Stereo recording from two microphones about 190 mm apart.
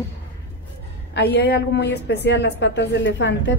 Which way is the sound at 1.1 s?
60° left (ahead or behind).